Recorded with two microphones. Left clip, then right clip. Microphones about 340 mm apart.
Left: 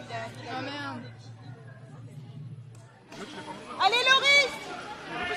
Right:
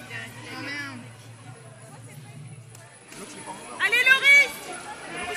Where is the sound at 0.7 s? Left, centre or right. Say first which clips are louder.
Right 3 dB; centre.